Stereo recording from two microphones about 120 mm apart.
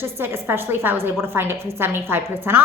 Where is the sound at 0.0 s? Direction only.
20° right (ahead or behind).